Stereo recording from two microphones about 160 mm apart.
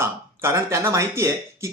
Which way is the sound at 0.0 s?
15° right (ahead or behind).